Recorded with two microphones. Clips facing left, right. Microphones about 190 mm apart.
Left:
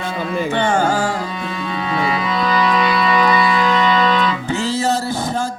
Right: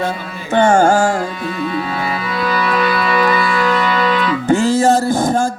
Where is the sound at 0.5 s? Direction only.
45° right (ahead or behind).